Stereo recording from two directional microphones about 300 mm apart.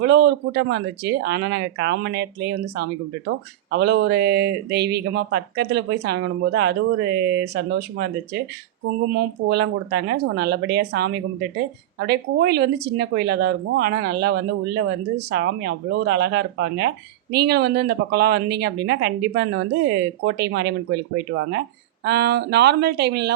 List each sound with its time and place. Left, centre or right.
0.0 s speech: right
22.0 s speech: right